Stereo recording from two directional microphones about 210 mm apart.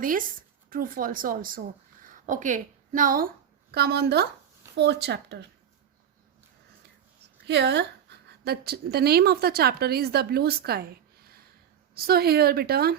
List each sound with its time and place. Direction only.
0.0 s a woman's voice: 40° right (ahead or behind)
7.4 s a woman's voice: 55° right (ahead or behind)